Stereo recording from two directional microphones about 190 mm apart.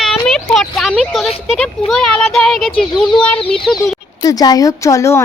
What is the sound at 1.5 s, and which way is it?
A woman's voice, 5° left (ahead or behind).